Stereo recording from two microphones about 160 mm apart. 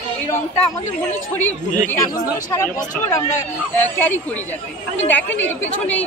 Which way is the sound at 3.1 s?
15° left (ahead or behind).